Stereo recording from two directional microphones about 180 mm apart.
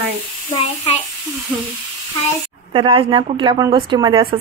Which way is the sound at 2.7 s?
30° right (ahead or behind).